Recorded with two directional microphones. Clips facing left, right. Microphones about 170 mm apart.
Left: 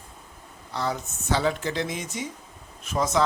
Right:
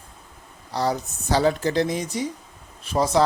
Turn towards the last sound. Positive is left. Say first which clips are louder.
# right 4 dB
turn(degrees=-35)  # may be behind; listen again after turning